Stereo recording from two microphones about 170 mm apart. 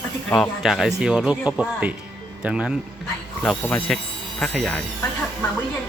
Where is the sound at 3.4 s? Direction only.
5° left (ahead or behind).